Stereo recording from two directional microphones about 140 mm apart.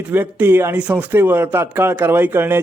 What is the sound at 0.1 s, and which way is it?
A man's voice, 15° right (ahead or behind).